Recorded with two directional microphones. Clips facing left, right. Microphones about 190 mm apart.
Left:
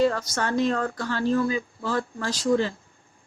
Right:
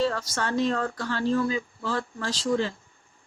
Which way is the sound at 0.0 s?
15° left (ahead or behind).